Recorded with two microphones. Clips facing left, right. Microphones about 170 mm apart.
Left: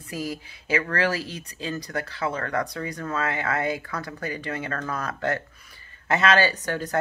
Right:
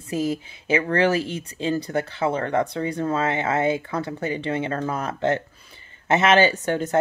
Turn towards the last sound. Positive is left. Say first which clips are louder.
# right 5 dB
turn(degrees=-25)  # may be behind; listen again after turning